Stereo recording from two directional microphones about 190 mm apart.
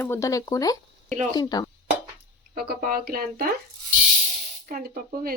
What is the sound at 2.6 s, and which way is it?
Speech, 50° right (ahead or behind).